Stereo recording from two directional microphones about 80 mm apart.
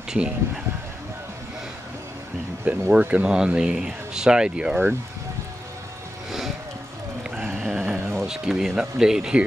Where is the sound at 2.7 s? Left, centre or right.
Right.